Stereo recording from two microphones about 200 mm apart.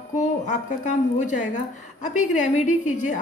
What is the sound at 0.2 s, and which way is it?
Speech, 35° left (ahead or behind).